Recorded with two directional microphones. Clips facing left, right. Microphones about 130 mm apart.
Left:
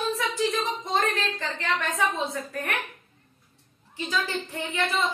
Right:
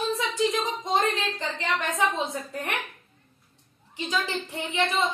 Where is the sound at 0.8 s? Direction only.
20° right (ahead or behind).